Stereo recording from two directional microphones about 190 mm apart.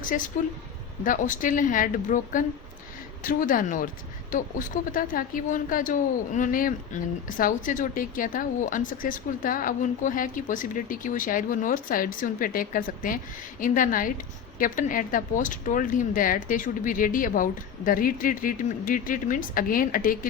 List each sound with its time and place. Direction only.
0.1 s a woman's voice: 45° left (ahead or behind)